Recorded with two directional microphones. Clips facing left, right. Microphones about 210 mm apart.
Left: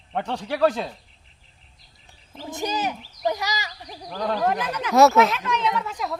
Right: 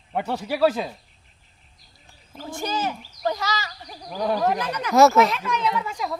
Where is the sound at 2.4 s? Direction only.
20° left (ahead or behind).